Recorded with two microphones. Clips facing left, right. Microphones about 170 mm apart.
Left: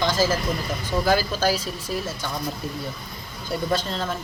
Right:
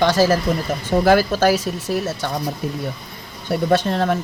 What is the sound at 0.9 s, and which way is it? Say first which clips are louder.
Speech: right 7 dB; 60° right (ahead or behind).